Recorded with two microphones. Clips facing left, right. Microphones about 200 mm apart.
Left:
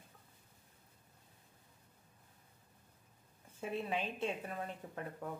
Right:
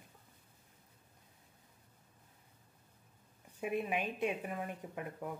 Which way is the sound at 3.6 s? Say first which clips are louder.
Right 3 dB; 15° right (ahead or behind).